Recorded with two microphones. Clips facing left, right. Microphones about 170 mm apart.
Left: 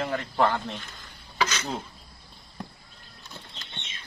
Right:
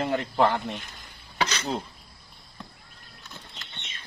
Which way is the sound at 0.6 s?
20° right (ahead or behind).